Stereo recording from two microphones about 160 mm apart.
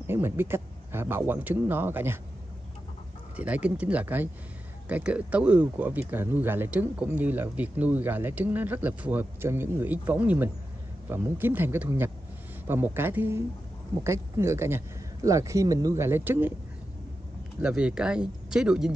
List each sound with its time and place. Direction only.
0.0 s speech: 15° right (ahead or behind)
3.3 s speech: 10° right (ahead or behind)
17.6 s speech: 5° right (ahead or behind)